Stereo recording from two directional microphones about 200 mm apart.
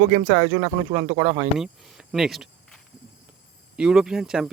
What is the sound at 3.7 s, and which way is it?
Speech, 5° right (ahead or behind).